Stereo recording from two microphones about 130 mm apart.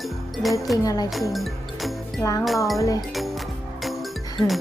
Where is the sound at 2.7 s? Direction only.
25° left (ahead or behind).